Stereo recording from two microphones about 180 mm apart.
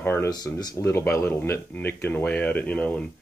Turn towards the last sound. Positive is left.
turn(degrees=5)  # may be behind; listen again after turning